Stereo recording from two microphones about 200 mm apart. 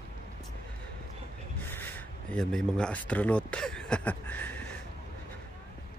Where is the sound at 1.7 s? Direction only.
10° left (ahead or behind).